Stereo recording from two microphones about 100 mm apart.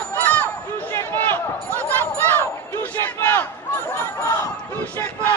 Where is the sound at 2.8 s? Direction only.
20° left (ahead or behind).